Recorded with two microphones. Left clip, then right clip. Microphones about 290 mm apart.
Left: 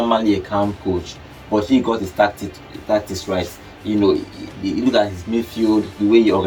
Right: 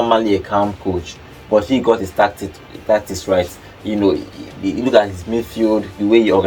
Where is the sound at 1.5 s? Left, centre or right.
Centre.